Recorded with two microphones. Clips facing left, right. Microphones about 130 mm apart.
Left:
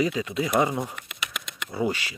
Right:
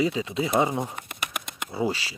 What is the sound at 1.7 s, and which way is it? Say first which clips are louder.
Speech: left 1 dB; 25° right (ahead or behind).